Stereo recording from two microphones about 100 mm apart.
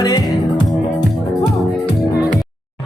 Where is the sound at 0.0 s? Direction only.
45° left (ahead or behind).